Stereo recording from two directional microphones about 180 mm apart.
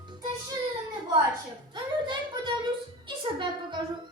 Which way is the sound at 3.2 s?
25° right (ahead or behind).